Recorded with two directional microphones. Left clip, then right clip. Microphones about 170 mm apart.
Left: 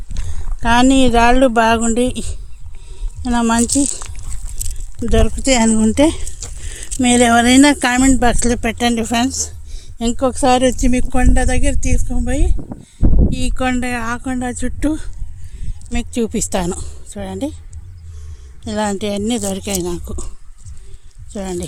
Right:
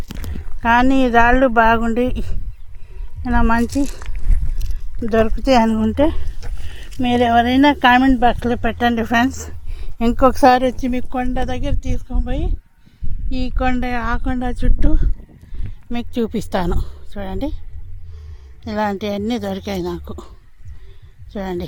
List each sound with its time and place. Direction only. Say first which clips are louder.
0.1 s a sound: right 1 dB; 5° right (ahead or behind)
1.1 s speech: right 3 dB; 30° left (ahead or behind)
5.0 s speech: even; 25° left (ahead or behind)
5.7 s speech: left 3 dB; 50° left (ahead or behind)
8.9 s speech: right 3 dB; 30° left (ahead or behind)
9.3 s a sound: left 10 dB; 10° left (ahead or behind)
10.2 s speech: right 2 dB; centre (ahead or behind)
13.3 s speech: right 3 dB; 15° left (ahead or behind)
14.8 s speech: left 6 dB; 20° left (ahead or behind)
15.9 s a woman's voice: left 2 dB; 5° left (ahead or behind)
18.6 s a woman's voice: left 1 dB; 10° left (ahead or behind)
21.3 s a woman's voice: left 1 dB; 10° left (ahead or behind)